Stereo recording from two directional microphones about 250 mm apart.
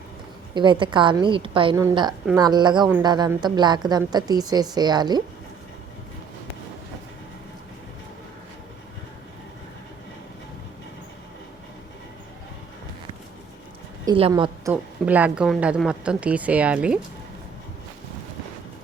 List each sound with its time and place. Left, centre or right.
0.5 s a woman's voice: centre
14.0 s a woman's voice: centre